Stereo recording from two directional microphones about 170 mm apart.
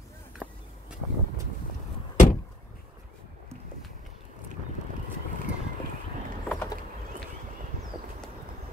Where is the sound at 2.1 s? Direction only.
50° left (ahead or behind).